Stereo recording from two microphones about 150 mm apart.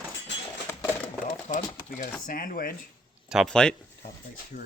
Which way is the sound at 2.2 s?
70° left (ahead or behind).